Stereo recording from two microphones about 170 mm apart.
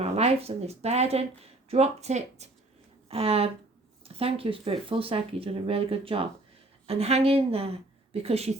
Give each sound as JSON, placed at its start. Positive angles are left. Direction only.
{"t": 0.0, "sound": "a woman's voice", "side_deg": -35}